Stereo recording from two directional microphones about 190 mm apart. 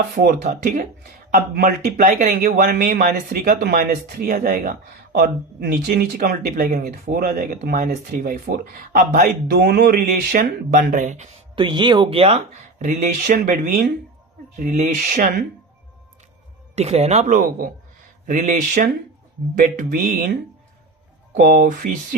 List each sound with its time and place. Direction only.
0.2 s speech: 50° right (ahead or behind)
11.5 s speech: 25° right (ahead or behind); by 15.4 s 50° right (ahead or behind)
16.7 s speech: 35° right (ahead or behind)